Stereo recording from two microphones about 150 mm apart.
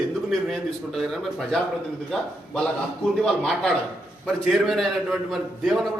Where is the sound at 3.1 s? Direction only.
Centre (ahead or behind).